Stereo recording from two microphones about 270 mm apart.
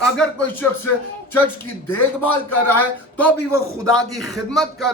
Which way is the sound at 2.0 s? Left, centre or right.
Left.